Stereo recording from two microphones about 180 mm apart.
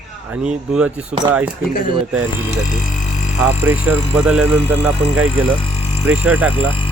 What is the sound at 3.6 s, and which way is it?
Speech, 10° right (ahead or behind).